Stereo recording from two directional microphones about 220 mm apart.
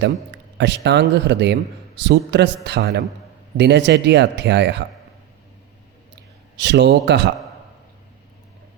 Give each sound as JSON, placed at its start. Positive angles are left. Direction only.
{"t": 0.3, "sound": "speech", "side_deg": -50}
{"t": 6.6, "sound": "speech", "side_deg": -50}